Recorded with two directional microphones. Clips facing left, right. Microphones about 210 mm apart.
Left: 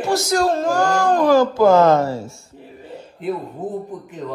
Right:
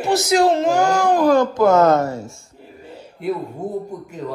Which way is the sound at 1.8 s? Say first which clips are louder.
Left 1 dB; centre (ahead or behind).